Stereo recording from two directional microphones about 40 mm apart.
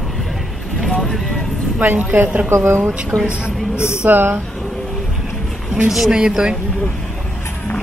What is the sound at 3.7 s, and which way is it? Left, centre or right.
Speech, left.